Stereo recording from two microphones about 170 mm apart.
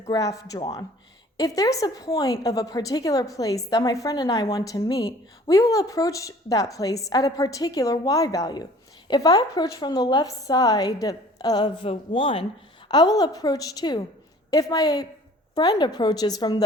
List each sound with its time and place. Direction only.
0.1 s a woman's voice: 20° left (ahead or behind)